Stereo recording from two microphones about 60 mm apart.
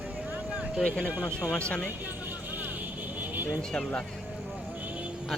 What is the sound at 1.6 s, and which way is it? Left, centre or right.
Speech, centre.